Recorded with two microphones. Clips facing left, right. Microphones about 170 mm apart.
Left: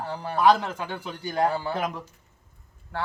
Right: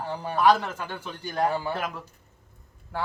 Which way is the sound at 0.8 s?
15° left (ahead or behind).